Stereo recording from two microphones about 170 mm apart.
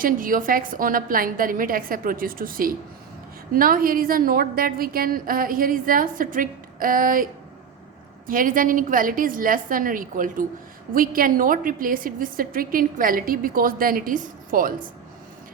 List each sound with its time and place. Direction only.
0.0 s a woman's voice: 55° right (ahead or behind)
8.3 s a woman's voice: 55° right (ahead or behind)